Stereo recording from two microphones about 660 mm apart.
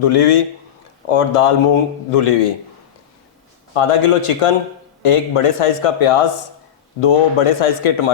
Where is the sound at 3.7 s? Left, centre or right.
Left.